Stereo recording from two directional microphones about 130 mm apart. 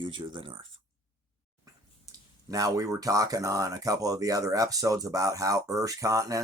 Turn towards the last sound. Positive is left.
turn(degrees=-25)  # may be behind; listen again after turning